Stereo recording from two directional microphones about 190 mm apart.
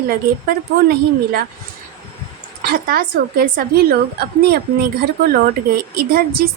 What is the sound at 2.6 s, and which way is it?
A woman's voice, 50° right (ahead or behind).